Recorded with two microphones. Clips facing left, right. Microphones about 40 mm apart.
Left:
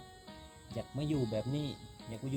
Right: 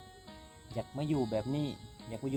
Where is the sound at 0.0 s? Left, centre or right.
Centre.